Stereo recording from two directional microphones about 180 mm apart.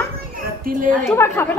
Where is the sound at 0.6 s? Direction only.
50° right (ahead or behind).